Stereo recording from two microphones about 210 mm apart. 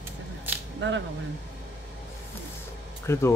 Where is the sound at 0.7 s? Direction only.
60° right (ahead or behind).